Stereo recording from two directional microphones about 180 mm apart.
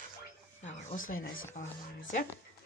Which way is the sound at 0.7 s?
45° left (ahead or behind).